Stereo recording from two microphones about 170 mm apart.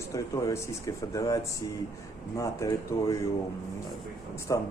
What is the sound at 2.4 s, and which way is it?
Speech, 20° left (ahead or behind).